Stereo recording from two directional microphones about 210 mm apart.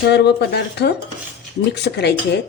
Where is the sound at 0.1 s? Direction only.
55° left (ahead or behind).